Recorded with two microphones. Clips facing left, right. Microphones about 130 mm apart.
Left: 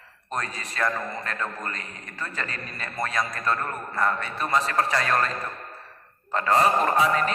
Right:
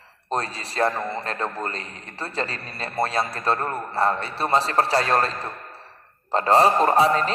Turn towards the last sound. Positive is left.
turn(degrees=-35)  # may be behind; listen again after turning